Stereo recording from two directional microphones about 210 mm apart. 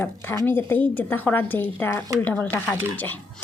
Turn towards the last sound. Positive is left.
turn(degrees=10)  # may be behind; listen again after turning